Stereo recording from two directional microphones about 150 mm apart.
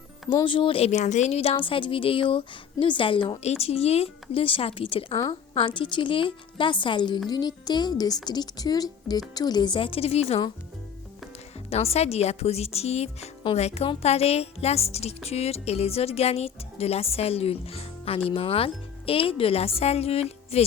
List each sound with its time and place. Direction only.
0.4 s a woman's voice: 35° left (ahead or behind)
0.9 s a woman's voice: 50° left (ahead or behind)
11.7 s a woman's voice: 45° left (ahead or behind)